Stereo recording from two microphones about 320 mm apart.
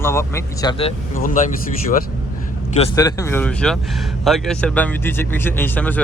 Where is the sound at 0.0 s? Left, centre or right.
Centre; by 1.5 s left.